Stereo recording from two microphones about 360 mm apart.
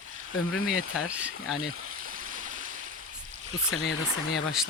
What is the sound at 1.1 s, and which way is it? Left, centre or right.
Speech, centre.